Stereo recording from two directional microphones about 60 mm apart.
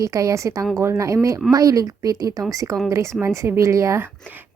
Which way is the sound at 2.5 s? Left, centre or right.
Right.